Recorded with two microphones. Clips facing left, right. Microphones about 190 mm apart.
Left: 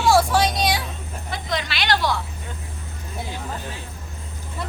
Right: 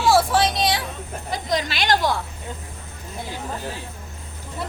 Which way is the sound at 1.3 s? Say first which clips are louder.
Right 3 dB; 45° right (ahead or behind).